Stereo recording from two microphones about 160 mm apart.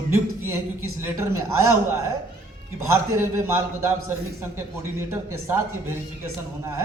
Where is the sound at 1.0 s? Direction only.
15° right (ahead or behind).